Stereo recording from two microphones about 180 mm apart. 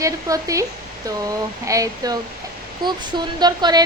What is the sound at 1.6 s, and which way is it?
Speech, 20° right (ahead or behind).